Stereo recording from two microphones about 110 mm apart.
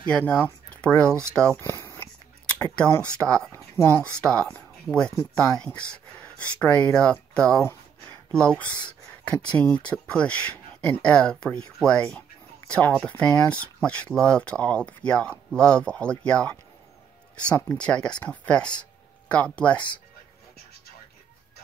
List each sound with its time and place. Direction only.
0.0 s speech: 10° left (ahead or behind)
1.6 s a sound: 20° left (ahead or behind)
3.0 s speech: 10° left (ahead or behind)
3.7 s speech: 20° left (ahead or behind)
4.2 s speech: 10° left (ahead or behind)